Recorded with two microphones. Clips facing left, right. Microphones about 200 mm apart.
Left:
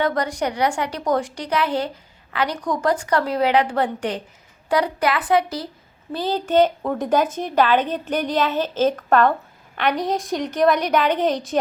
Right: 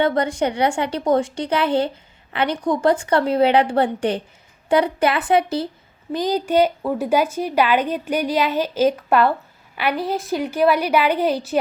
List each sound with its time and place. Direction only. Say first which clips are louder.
0.0 s speech: right 3 dB; 25° right (ahead or behind)
6.1 s speech: right 2 dB; 15° right (ahead or behind)